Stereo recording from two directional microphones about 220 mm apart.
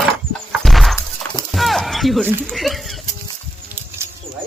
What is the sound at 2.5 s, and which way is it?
Speech, centre (ahead or behind).